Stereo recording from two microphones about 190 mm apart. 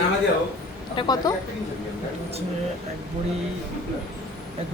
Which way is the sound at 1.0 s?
20° left (ahead or behind).